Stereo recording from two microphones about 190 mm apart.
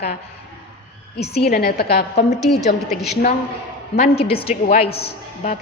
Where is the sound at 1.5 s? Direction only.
50° left (ahead or behind).